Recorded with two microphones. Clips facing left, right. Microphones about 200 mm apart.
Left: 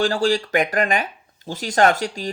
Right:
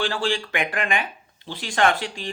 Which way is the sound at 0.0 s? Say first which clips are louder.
Left 6 dB; 40° left (ahead or behind).